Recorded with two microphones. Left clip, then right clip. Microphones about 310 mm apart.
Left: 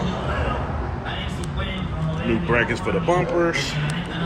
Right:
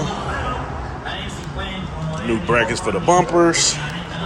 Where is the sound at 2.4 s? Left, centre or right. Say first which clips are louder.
Right 4 dB; centre.